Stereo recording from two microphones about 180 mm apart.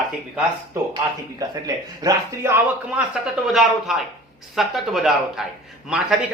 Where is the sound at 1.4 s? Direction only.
20° right (ahead or behind).